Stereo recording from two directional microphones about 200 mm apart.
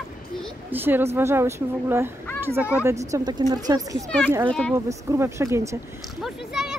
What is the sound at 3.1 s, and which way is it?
Speech, 20° right (ahead or behind).